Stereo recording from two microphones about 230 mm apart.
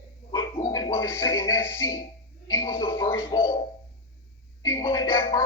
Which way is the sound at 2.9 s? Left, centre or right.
Centre.